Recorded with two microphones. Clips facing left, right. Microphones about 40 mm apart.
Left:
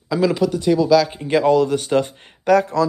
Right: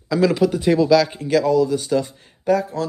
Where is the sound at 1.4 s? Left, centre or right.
Left.